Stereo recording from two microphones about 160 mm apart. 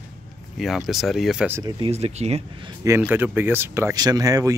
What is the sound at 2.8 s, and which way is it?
Speech, 15° right (ahead or behind).